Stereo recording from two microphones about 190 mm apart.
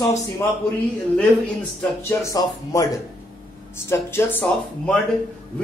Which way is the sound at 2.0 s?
15° left (ahead or behind).